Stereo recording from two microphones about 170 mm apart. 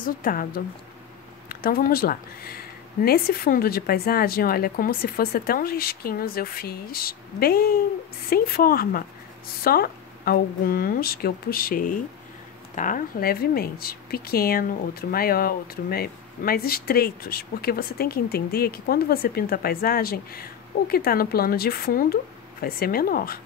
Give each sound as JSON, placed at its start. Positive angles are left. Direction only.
{"t": 0.0, "sound": "speech", "side_deg": 55}
{"t": 1.5, "sound": "speech", "side_deg": 60}